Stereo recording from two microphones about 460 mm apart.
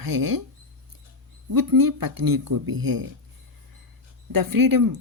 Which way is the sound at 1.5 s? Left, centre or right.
Right.